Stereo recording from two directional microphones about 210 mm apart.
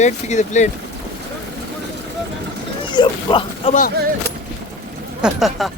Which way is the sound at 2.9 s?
25° left (ahead or behind).